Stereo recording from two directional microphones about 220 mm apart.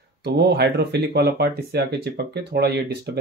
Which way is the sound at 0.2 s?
50° right (ahead or behind).